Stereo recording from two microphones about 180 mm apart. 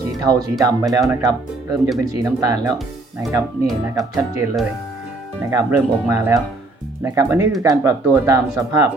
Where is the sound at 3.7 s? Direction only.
Centre (ahead or behind).